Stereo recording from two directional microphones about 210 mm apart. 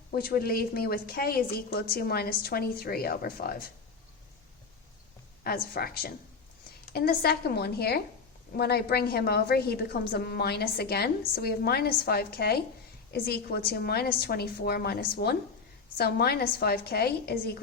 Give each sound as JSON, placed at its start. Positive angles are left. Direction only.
{"t": 0.1, "sound": "a woman's voice", "side_deg": 45}
{"t": 5.7, "sound": "a woman's voice", "side_deg": 45}